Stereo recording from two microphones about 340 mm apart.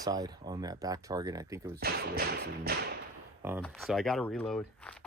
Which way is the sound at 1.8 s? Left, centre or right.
Right.